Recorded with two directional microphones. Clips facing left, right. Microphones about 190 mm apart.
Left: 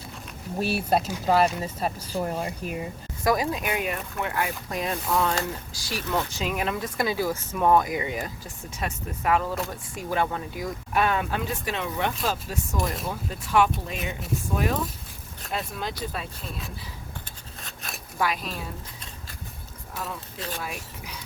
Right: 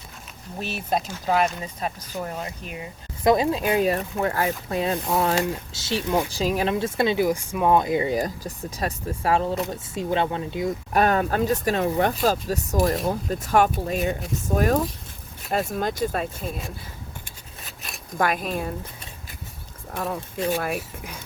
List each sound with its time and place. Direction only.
0.6 s speech: 10° left (ahead or behind)
3.2 s speech: 25° right (ahead or behind); by 7.8 s 10° right (ahead or behind)
7.8 s speech: 30° right (ahead or behind)
10.9 s speech: 40° right (ahead or behind)
17.7 s zipper: centre (ahead or behind)
18.2 s speech: 50° right (ahead or behind)
19.9 s speech: 55° right (ahead or behind)